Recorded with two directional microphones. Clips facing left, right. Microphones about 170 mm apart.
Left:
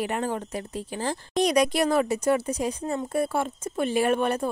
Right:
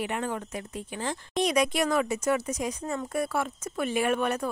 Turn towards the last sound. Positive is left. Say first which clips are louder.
# left 3 dB
turn(degrees=30)  # may be behind; listen again after turning